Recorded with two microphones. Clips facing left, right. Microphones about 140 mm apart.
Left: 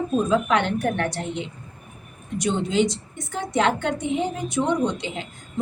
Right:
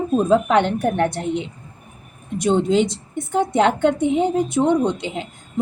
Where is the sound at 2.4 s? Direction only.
55° right (ahead or behind).